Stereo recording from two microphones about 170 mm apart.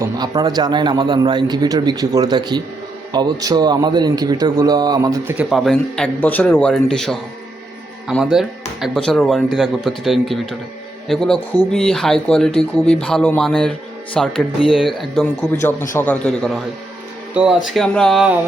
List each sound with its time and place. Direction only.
0.0 s a man's voice: 25° right (ahead or behind)
5.4 s speech: centre (ahead or behind)
8.2 s speech: centre (ahead or behind)